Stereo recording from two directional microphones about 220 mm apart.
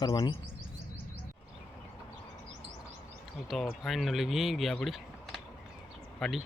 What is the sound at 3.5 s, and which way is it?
Speech, centre (ahead or behind).